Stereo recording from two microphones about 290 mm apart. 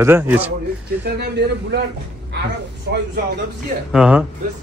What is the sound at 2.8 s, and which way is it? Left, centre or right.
Speech, right.